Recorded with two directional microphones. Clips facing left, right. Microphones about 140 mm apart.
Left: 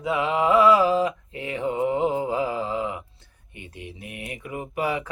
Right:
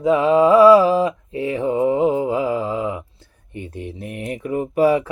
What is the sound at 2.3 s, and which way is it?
Mantra, 25° right (ahead or behind).